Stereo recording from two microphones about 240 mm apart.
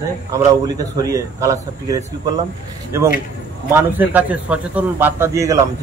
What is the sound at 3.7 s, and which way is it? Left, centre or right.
A man's voice, centre.